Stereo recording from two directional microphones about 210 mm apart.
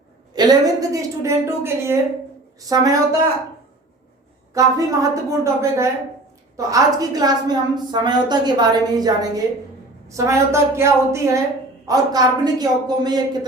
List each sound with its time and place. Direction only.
0.3 s a woman's voice: 20° right (ahead or behind)
4.5 s a woman's voice: 15° right (ahead or behind)